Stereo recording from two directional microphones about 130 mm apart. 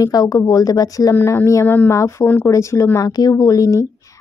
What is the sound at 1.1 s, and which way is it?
A woman's voice, 20° left (ahead or behind).